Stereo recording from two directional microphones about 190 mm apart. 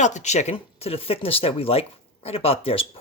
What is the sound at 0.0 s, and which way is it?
Speech, 40° left (ahead or behind).